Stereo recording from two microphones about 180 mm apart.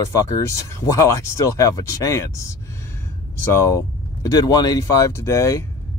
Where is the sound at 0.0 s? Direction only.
20° left (ahead or behind).